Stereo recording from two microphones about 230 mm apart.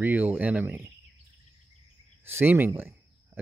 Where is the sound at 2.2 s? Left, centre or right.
Centre.